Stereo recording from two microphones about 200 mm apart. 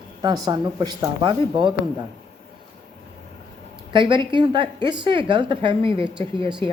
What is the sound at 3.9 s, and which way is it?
Speech, 25° right (ahead or behind).